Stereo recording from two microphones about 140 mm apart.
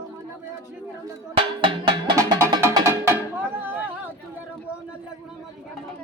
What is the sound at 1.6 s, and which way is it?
Music, 35° right (ahead or behind).